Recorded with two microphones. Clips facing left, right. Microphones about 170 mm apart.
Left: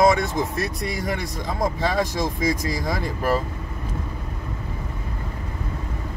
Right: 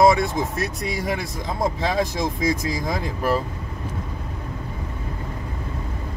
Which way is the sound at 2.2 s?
25° right (ahead or behind).